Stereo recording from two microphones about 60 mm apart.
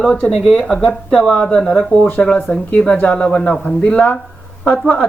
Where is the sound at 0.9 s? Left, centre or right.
Centre.